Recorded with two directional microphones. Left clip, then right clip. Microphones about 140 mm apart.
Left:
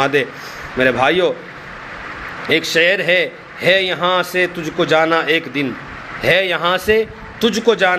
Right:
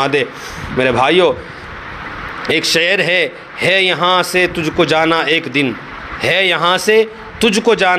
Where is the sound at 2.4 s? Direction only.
35° right (ahead or behind).